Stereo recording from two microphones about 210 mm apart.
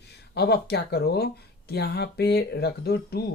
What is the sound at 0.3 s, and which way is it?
Speech, 50° left (ahead or behind).